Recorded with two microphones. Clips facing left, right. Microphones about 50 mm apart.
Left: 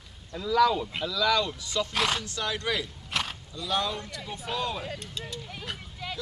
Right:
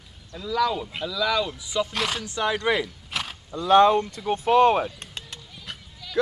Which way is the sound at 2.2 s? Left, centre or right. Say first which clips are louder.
Right 7 dB; right.